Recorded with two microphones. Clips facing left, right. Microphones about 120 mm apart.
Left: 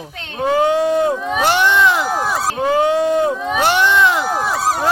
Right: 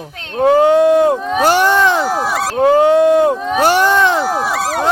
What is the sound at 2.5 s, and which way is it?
Speech, 50° right (ahead or behind).